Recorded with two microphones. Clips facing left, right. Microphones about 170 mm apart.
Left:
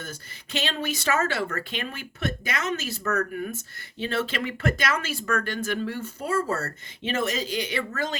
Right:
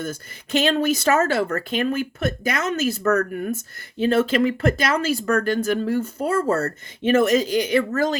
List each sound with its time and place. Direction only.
0.0 s speech: 45° right (ahead or behind)